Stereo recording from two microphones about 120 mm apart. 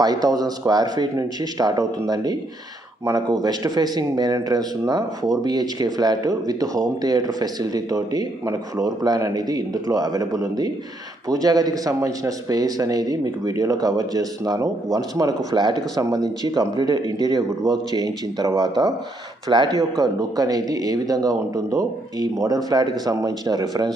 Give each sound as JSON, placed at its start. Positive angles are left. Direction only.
{"t": 0.0, "sound": "speech", "side_deg": -35}